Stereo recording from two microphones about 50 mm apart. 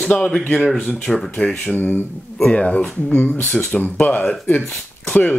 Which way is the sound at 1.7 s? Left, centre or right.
Left.